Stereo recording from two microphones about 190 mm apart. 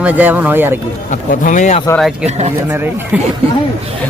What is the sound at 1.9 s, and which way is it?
Speech, centre (ahead or behind).